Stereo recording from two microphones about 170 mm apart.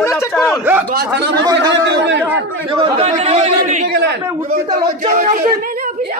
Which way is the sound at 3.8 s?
75° right (ahead or behind).